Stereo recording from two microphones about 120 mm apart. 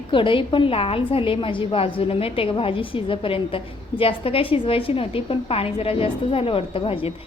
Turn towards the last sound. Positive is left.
turn(degrees=50)  # may be behind; listen again after turning